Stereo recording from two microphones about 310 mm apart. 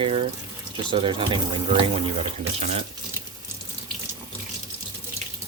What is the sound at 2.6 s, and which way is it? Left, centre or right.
Speech, right.